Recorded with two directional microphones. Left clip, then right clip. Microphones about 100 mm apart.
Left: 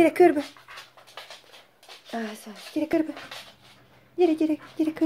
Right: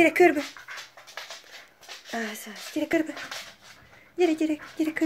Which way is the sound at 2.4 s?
15° left (ahead or behind).